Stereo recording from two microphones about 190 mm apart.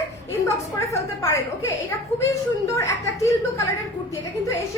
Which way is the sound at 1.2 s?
15° left (ahead or behind).